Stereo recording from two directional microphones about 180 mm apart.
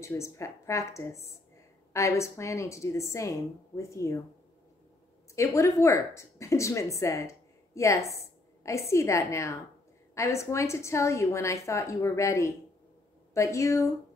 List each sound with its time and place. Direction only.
0.0 s a woman's voice: 15° left (ahead or behind)
5.3 s a woman's voice: 15° left (ahead or behind)
8.2 s a sound: 15° left (ahead or behind)
8.9 s a woman's voice: 15° left (ahead or behind)